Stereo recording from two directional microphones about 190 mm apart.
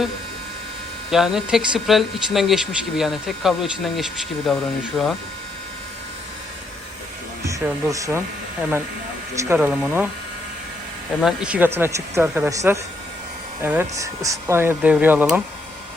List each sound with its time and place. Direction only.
1.1 s speech: centre (ahead or behind)
7.4 s speech: 15° right (ahead or behind)
9.3 s speech: 15° right (ahead or behind)
11.2 s speech: 5° right (ahead or behind)